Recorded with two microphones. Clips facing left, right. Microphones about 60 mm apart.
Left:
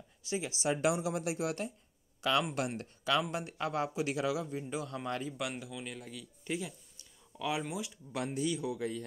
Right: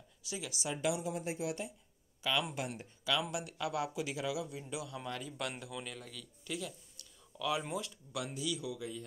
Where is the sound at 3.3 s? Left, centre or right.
Left.